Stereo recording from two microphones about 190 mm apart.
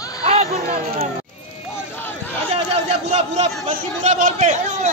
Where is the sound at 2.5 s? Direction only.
35° right (ahead or behind).